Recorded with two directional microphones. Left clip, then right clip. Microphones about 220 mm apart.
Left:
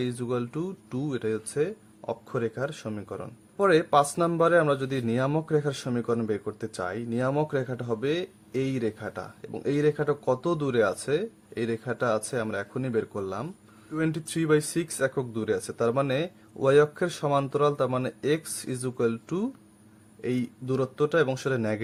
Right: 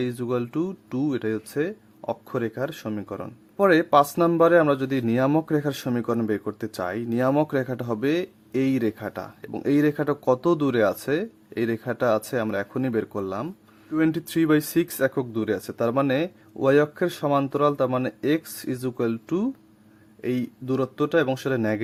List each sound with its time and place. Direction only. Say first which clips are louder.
0.0 s speech: right 3 dB; 25° right (ahead or behind)